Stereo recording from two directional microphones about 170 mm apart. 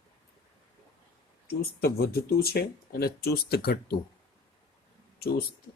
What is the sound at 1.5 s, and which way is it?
Speech, 65° left (ahead or behind).